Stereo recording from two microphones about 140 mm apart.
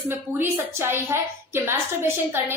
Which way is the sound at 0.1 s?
15° right (ahead or behind).